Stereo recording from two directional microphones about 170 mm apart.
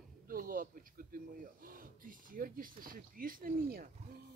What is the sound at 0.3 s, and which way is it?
Speech, 55° right (ahead or behind).